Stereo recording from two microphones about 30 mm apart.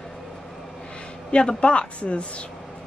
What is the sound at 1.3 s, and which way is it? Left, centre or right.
Speech, left.